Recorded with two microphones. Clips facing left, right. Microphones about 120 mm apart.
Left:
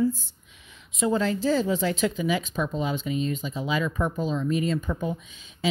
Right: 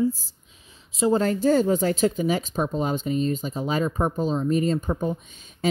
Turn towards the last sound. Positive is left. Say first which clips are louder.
# right 3 dB
turn(degrees=-45)  # may be behind; listen again after turning